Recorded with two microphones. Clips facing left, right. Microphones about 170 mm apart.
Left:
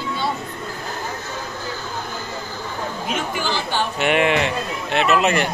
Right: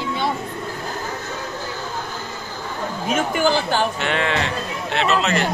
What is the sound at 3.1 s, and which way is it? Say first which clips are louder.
Speech: right 7 dB; 45° right (ahead or behind).